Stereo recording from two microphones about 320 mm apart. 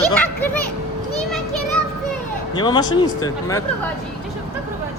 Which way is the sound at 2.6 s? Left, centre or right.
Centre.